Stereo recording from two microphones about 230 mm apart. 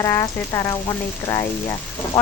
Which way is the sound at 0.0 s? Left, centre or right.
Centre.